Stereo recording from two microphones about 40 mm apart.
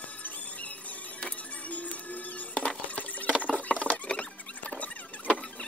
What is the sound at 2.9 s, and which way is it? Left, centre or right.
Sewing machine, left.